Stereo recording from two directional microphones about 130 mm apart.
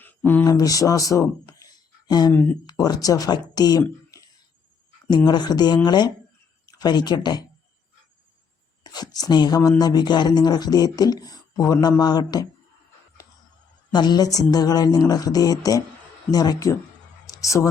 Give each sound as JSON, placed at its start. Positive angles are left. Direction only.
{"t": 0.0, "sound": "a sound", "side_deg": 15}
{"t": 0.4, "sound": "speech", "side_deg": 30}
{"t": 2.3, "sound": "speech", "side_deg": 15}
{"t": 2.6, "sound": "speech", "side_deg": 30}
{"t": 8.8, "sound": "speech", "side_deg": 30}
{"t": 13.9, "sound": "speech", "side_deg": 35}
{"t": 17.2, "sound": "a sound", "side_deg": 25}